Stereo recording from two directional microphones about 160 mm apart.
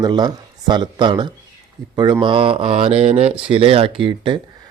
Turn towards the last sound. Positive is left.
turn(degrees=-30)  # may be behind; listen again after turning